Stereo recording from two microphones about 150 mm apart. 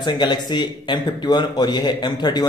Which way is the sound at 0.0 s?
30° left (ahead or behind).